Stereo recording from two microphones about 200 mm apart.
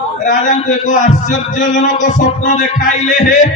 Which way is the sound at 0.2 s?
40° left (ahead or behind).